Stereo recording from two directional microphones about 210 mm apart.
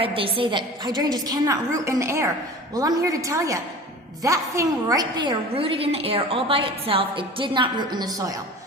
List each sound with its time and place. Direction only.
0.0 s a woman's voice: 25° right (ahead or behind)